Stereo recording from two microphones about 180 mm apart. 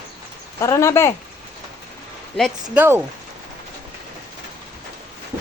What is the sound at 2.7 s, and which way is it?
Speech, 10° right (ahead or behind).